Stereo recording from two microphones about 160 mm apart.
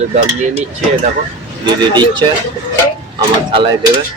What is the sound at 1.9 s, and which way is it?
Speech, 30° right (ahead or behind).